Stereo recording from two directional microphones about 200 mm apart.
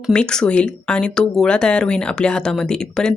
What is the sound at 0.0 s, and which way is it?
Speech, 5° left (ahead or behind).